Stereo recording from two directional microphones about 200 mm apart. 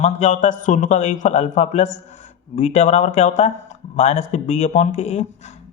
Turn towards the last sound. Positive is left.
turn(degrees=35)  # may be behind; listen again after turning